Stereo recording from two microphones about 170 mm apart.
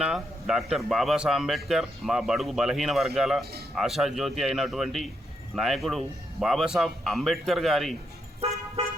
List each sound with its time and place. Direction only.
0.0 s a man's voice: 5° right (ahead or behind)
8.4 s car: 35° right (ahead or behind)